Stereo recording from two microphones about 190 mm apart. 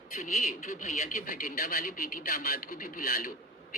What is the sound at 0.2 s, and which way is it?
A man's voice, 40° left (ahead or behind).